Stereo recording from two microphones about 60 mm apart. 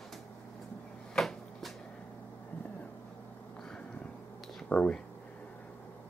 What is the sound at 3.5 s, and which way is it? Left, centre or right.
Vehicle, centre.